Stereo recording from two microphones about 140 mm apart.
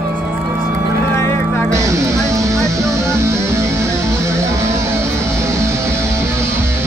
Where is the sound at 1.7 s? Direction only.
20° right (ahead or behind).